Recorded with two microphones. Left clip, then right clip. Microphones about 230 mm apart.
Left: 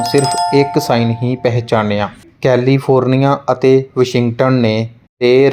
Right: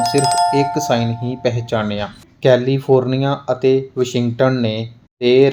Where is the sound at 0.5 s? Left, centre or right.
Centre.